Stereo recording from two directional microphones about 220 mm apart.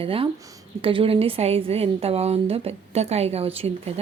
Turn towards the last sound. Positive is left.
turn(degrees=-25)  # may be behind; listen again after turning